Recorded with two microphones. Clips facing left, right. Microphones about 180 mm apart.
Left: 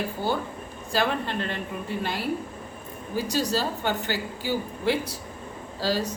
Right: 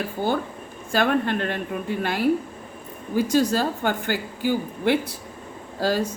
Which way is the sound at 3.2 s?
50° right (ahead or behind).